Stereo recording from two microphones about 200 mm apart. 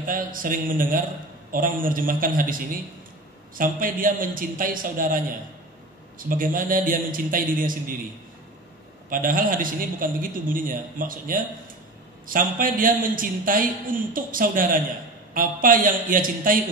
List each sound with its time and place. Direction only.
0.0 s a man's voice: 45° right (ahead or behind)
9.1 s a man's voice: 45° right (ahead or behind)